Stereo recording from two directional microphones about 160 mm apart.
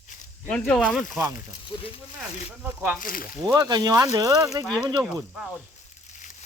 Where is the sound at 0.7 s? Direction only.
Centre (ahead or behind).